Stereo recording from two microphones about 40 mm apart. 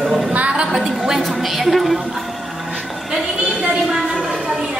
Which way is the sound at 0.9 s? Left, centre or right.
Centre.